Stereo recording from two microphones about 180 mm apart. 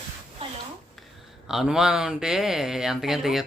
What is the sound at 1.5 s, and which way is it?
Speech, 5° right (ahead or behind).